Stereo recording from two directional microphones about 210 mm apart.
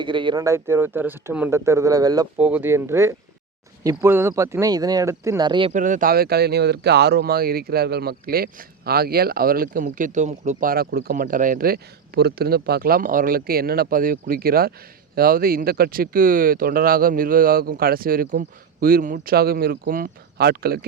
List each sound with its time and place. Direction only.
0.0 s speech: 20° right (ahead or behind)
5.7 s speech: 40° right (ahead or behind)